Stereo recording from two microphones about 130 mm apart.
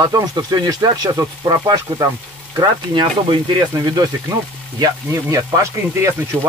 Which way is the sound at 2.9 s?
40° right (ahead or behind).